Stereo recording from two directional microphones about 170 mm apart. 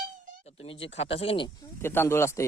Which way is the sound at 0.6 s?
35° left (ahead or behind).